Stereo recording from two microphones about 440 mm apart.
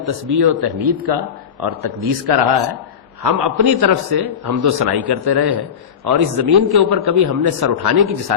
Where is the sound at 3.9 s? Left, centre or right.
Right.